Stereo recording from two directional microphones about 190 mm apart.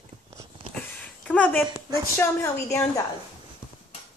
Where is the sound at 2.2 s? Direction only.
15° left (ahead or behind).